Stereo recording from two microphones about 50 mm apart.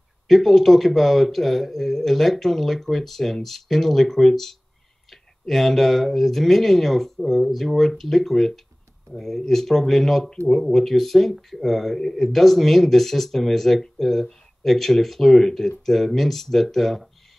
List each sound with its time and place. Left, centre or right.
0.3 s speech: centre